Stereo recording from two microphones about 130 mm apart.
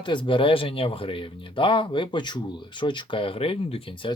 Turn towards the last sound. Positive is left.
turn(degrees=40)  # may be behind; listen again after turning